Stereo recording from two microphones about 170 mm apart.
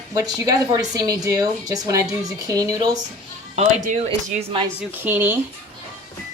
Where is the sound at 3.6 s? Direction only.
45° right (ahead or behind).